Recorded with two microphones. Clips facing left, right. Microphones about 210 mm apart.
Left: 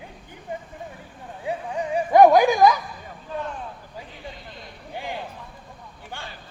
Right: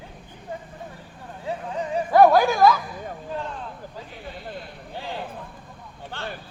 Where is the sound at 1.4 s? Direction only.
15° left (ahead or behind).